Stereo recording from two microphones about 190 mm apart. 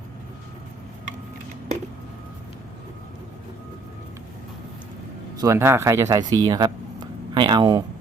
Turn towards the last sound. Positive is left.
turn(degrees=-20)  # may be behind; listen again after turning